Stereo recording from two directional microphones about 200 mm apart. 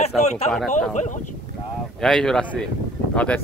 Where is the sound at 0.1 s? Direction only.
Centre (ahead or behind).